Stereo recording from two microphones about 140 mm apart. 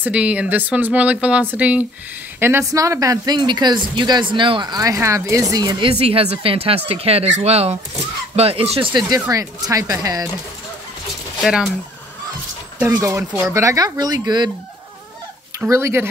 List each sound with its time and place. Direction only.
0.0 s speech: 10° right (ahead or behind); by 9.0 s 40° right (ahead or behind)
9.3 s speech: 25° right (ahead or behind)
11.4 s speech: 5° right (ahead or behind)
12.7 s speech: 15° right (ahead or behind)
15.6 s speech: 20° right (ahead or behind)